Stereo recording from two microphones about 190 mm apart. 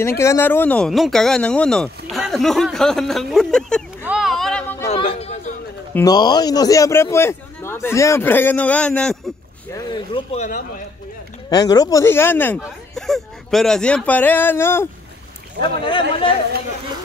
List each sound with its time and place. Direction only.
0.2 s speech: 15° left (ahead or behind)
4.0 s a sound: 5° right (ahead or behind)
4.8 s a sound: 30° left (ahead or behind)
5.9 s speech: 20° left (ahead or behind); by 9.3 s centre (ahead or behind)
9.8 s speech: 20° left (ahead or behind)
10.3 s speech: 40° left (ahead or behind)
11.5 s speech: 20° left (ahead or behind)
15.8 s speech: 25° left (ahead or behind)